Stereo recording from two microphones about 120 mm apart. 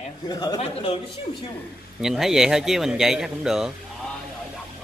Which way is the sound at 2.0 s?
5° right (ahead or behind).